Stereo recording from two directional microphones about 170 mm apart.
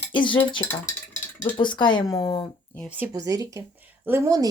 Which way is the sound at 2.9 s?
15° right (ahead or behind).